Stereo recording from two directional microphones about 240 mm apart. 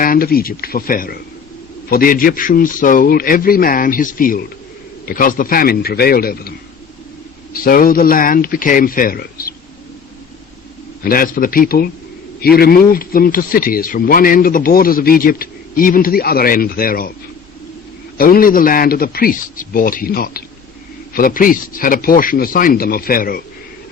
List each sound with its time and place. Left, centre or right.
0.0 s a man's voice: left
7.5 s a man's voice: left
11.0 s a man's voice: left
18.2 s a man's voice: left